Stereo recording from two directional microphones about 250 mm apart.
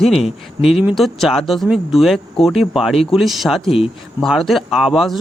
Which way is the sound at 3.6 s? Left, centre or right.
Left.